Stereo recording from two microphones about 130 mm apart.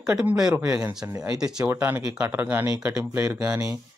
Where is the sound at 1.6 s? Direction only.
15° right (ahead or behind).